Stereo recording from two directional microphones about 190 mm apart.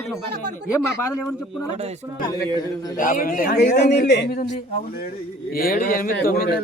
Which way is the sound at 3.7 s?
40° left (ahead or behind).